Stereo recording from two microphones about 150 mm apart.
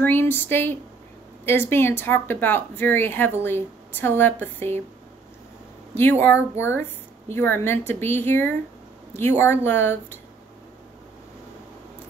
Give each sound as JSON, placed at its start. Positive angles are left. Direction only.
{"t": 0.0, "sound": "a woman's voice", "side_deg": 15}
{"t": 5.9, "sound": "a woman's voice", "side_deg": 15}